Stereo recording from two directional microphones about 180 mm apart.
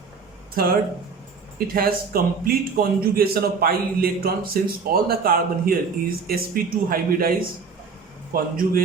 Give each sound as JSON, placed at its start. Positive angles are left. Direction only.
{"t": 0.6, "sound": "a man's voice", "side_deg": -55}